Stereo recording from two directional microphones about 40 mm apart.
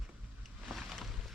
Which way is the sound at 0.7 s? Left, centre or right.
Centre.